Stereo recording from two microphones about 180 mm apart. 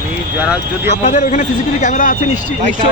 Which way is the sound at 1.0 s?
45° left (ahead or behind).